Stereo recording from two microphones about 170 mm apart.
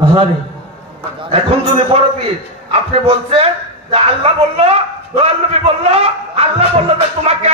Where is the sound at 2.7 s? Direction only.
35° right (ahead or behind).